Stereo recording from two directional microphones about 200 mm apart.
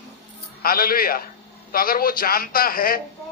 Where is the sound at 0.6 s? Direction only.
45° left (ahead or behind).